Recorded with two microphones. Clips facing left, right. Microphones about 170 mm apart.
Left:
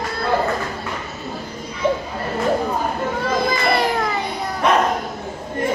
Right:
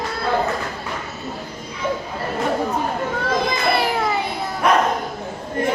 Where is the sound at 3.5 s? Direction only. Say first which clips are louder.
Left 1 dB; 5° right (ahead or behind).